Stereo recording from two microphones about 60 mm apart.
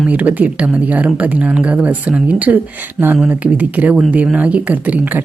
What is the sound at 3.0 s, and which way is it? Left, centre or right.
Speech, centre.